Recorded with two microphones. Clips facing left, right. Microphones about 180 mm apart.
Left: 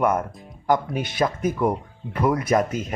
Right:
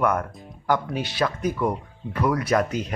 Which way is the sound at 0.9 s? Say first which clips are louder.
Left 1 dB; 50° left (ahead or behind).